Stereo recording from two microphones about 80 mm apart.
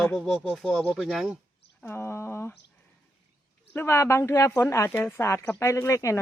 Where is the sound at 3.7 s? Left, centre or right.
Left.